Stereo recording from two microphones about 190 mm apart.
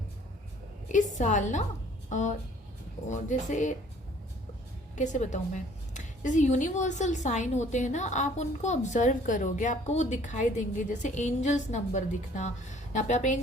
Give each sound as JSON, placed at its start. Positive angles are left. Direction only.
{"t": 0.9, "sound": "a woman's voice", "side_deg": 40}
{"t": 4.9, "sound": "a woman's voice", "side_deg": 40}